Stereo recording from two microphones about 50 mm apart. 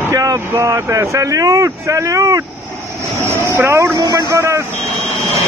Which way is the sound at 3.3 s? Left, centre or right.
Right.